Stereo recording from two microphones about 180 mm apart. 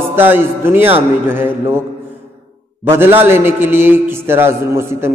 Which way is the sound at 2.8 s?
10° right (ahead or behind).